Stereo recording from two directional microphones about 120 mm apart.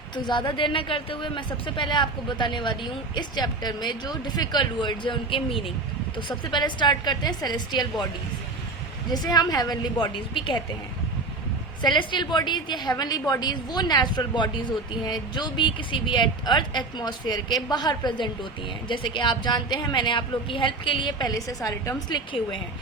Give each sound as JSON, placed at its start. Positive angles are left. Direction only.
{"t": 0.3, "sound": "speech", "side_deg": 40}
{"t": 9.1, "sound": "speech", "side_deg": 35}
{"t": 10.3, "sound": "a woman's voice", "side_deg": 45}
{"t": 11.9, "sound": "speech", "side_deg": 40}